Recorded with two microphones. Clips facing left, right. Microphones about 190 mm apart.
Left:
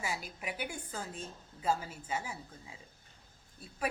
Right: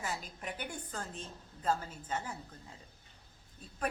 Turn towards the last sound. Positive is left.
turn(degrees=10)  # may be behind; listen again after turning